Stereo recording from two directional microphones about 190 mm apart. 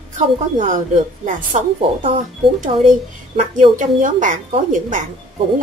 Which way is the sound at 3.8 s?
45° right (ahead or behind).